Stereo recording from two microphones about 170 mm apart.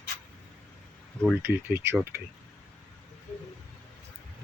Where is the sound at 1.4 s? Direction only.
15° right (ahead or behind).